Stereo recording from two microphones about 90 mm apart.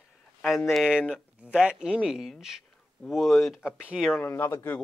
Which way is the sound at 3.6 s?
15° right (ahead or behind).